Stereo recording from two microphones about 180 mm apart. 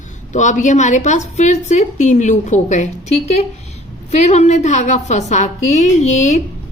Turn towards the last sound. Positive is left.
turn(degrees=40)  # may be behind; listen again after turning